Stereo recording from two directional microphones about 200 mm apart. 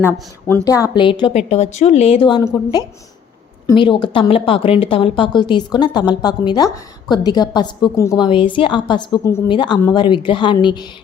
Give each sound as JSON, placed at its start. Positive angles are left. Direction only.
{"t": 0.6, "sound": "a woman's voice", "side_deg": 15}
{"t": 3.7, "sound": "a woman's voice", "side_deg": 25}
{"t": 8.3, "sound": "a woman's voice", "side_deg": 25}